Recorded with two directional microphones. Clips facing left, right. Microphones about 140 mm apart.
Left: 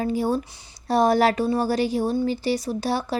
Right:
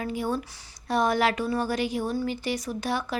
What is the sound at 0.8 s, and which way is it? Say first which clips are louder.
Speech: left 5 dB; 35° left (ahead or behind).